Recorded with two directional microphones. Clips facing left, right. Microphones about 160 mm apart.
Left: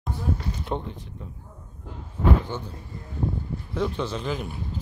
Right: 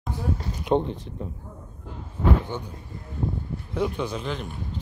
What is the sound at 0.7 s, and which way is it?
Speech, 15° right (ahead or behind).